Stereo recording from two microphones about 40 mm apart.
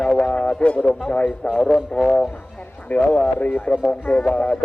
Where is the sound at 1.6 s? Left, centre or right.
Left.